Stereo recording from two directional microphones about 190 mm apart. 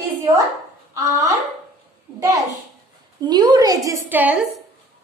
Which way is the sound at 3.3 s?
20° right (ahead or behind).